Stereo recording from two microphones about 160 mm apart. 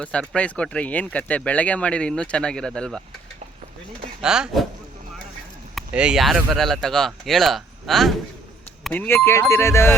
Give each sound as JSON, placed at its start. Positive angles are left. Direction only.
{"t": 0.0, "sound": "speech", "side_deg": 5}
{"t": 4.2, "sound": "speech", "side_deg": -5}
{"t": 5.7, "sound": "speech", "side_deg": -5}